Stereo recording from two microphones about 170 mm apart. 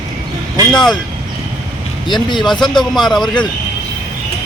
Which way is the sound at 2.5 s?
Centre (ahead or behind).